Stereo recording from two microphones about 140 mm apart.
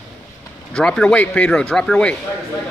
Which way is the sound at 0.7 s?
5° left (ahead or behind).